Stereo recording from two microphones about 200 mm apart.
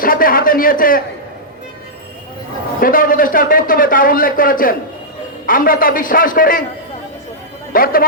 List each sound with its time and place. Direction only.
0.0 s a man's voice: 45° left (ahead or behind)
2.8 s a man's voice: 45° left (ahead or behind)
7.7 s speech: 45° left (ahead or behind)